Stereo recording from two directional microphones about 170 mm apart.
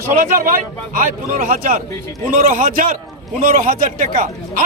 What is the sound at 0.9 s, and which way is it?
A man's voice, 55° right (ahead or behind).